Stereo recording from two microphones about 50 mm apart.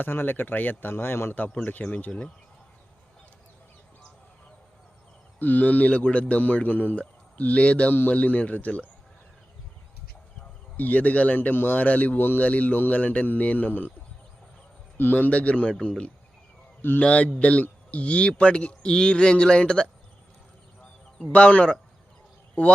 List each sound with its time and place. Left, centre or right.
0.0 s speech: left
1.4 s speech: left
2.0 s speech: left
5.4 s speech: left
7.9 s speech: left
10.8 s speech: left
12.5 s speech: left
14.9 s speech: left; by 19.9 s centre
21.3 s speech: left